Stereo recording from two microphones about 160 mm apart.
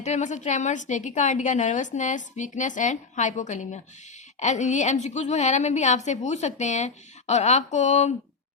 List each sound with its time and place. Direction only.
0.0 s a woman's voice: 50° left (ahead or behind)